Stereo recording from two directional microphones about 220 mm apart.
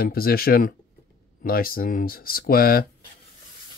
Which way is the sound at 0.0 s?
45° left (ahead or behind).